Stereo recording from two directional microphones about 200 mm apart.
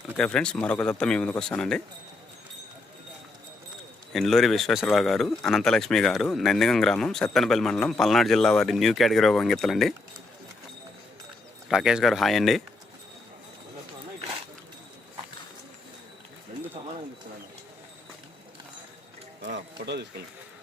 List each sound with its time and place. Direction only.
0.2 s speech: 5° left (ahead or behind)
4.1 s speech: centre (ahead or behind)
11.7 s speech: 5° right (ahead or behind)
19.4 s run: 60° right (ahead or behind)